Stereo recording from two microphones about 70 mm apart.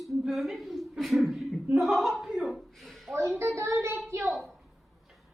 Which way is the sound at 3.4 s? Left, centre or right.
Right.